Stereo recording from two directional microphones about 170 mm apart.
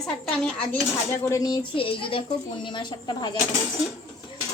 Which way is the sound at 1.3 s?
25° left (ahead or behind).